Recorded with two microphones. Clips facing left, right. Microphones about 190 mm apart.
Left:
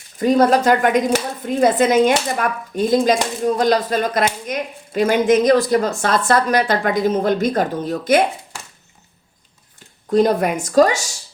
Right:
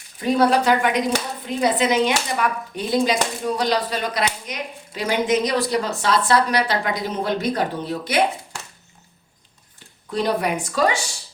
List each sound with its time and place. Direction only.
0.2 s speech: 45° left (ahead or behind)
10.1 s speech: 45° left (ahead or behind)